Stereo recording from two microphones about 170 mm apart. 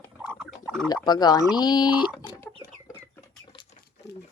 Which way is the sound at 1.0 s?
25° left (ahead or behind).